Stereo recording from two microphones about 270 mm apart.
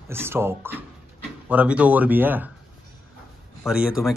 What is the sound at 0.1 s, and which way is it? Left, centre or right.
Speech, centre.